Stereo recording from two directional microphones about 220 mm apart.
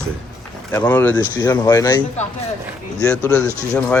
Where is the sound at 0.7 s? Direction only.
10° left (ahead or behind).